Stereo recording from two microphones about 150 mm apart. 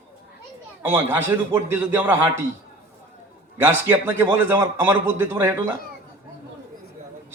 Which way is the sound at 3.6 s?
15° right (ahead or behind).